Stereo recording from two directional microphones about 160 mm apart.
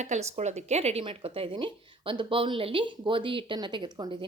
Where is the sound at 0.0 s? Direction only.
45° right (ahead or behind).